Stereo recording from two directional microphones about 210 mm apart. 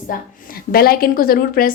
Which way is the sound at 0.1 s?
45° left (ahead or behind).